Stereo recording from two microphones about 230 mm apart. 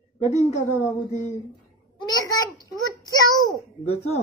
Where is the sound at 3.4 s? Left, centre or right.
Left.